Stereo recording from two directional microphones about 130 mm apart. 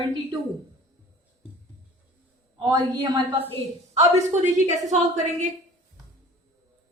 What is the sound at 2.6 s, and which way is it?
Speech, 30° right (ahead or behind).